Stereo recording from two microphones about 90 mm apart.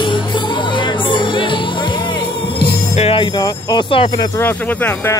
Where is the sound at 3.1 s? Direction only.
65° left (ahead or behind).